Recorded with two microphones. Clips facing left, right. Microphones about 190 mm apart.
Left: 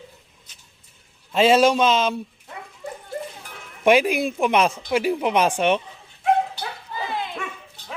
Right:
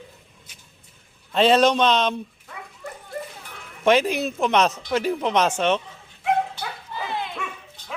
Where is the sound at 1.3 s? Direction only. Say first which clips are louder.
Left 1 dB; 5° left (ahead or behind).